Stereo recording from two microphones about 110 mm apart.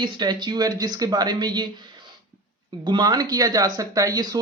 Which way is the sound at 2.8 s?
40° right (ahead or behind).